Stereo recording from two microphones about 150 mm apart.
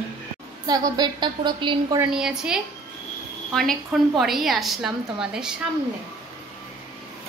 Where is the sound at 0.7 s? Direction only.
25° right (ahead or behind).